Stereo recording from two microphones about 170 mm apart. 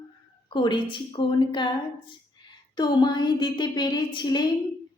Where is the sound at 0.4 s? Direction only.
25° left (ahead or behind).